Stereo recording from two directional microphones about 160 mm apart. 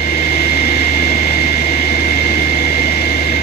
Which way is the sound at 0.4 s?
75° left (ahead or behind).